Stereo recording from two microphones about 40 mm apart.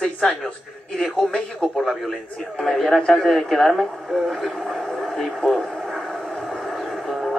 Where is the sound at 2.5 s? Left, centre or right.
Centre.